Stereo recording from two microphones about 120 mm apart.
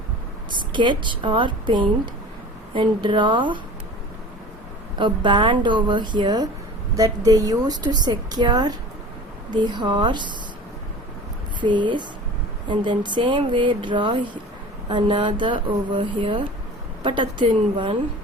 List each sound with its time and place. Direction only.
0.7 s speech: 40° right (ahead or behind)
4.9 s speech: 40° right (ahead or behind)
11.6 s speech: 40° right (ahead or behind)